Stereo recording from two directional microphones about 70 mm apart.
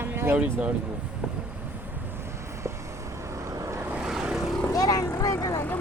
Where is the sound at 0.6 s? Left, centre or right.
Centre.